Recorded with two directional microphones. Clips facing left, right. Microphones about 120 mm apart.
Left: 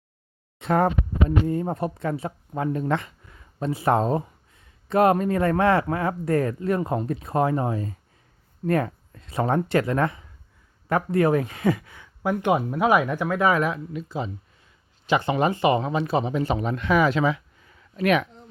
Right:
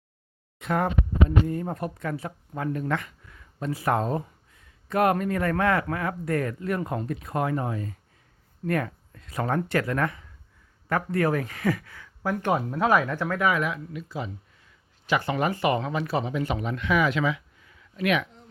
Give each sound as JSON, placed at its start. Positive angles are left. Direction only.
{"t": 0.6, "sound": "speech", "side_deg": 35}
{"t": 13.4, "sound": "speech", "side_deg": 40}